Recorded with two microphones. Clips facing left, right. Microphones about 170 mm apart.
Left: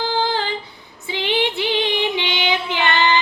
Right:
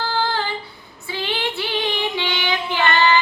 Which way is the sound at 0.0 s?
15° left (ahead or behind).